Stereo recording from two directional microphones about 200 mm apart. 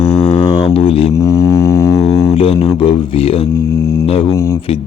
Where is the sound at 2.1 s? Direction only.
20° left (ahead or behind).